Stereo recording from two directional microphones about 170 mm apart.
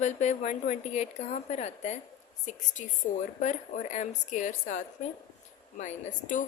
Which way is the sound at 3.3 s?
45° left (ahead or behind).